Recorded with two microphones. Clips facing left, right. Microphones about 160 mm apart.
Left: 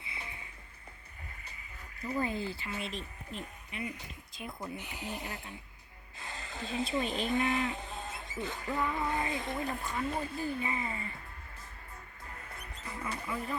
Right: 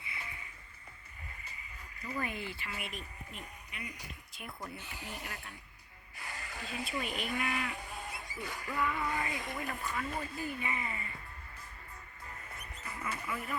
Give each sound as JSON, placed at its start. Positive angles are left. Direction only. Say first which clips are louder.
{"t": 0.1, "sound": "music", "louder": "left 1 dB", "side_deg": 25}
{"t": 2.1, "sound": "speech", "louder": "left 5 dB", "side_deg": 30}
{"t": 4.4, "sound": "speech", "louder": "left 5 dB", "side_deg": 20}
{"t": 13.2, "sound": "speech", "louder": "left 3 dB", "side_deg": 30}